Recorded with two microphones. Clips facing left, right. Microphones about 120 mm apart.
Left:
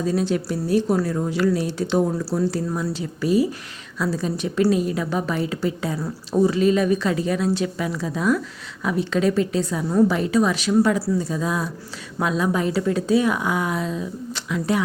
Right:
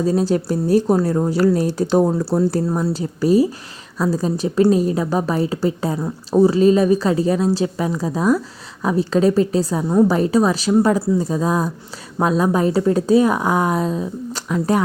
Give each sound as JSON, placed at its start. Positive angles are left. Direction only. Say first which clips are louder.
{"t": 0.0, "sound": "a woman's voice", "louder": "right 4 dB", "side_deg": -35}